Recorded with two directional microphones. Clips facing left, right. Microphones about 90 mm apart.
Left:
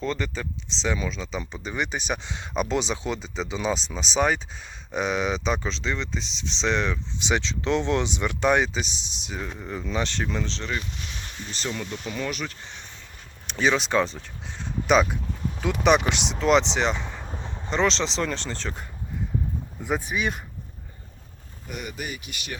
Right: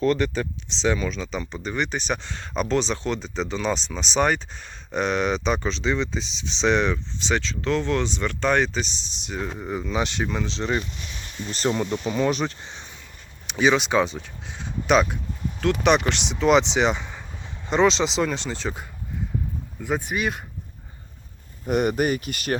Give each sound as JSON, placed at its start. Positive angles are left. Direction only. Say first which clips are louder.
{"t": 0.0, "sound": "speech", "louder": "right 7 dB", "side_deg": -5}
{"t": 7.2, "sound": "speech", "louder": "right 1 dB", "side_deg": 15}
{"t": 11.7, "sound": "speech", "louder": "right 7 dB", "side_deg": -30}
{"t": 13.5, "sound": "speech", "louder": "right 3 dB", "side_deg": -5}
{"t": 17.2, "sound": "a sound", "louder": "left 4 dB", "side_deg": 40}
{"t": 17.7, "sound": "speech", "louder": "right 4 dB", "side_deg": -10}
{"t": 21.7, "sound": "speech", "louder": "right 13 dB", "side_deg": -55}